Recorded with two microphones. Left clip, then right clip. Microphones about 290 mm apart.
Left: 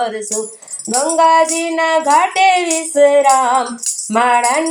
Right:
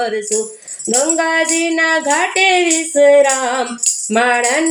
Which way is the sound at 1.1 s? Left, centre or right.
Centre.